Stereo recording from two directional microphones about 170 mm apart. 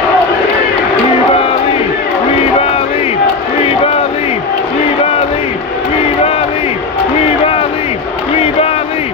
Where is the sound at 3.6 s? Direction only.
35° left (ahead or behind).